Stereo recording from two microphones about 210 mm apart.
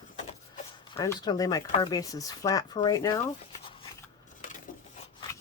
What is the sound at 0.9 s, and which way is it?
Speech, 20° left (ahead or behind).